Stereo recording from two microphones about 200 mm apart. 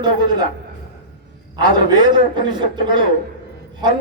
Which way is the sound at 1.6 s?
20° right (ahead or behind).